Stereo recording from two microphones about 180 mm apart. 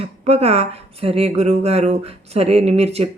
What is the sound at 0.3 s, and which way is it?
Speech, 35° right (ahead or behind).